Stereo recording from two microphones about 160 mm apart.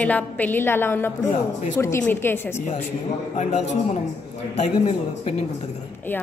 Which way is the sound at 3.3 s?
45° left (ahead or behind).